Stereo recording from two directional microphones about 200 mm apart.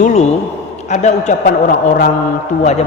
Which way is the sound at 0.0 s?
35° left (ahead or behind).